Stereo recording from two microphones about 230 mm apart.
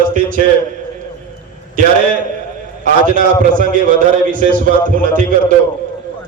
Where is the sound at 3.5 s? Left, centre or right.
Right.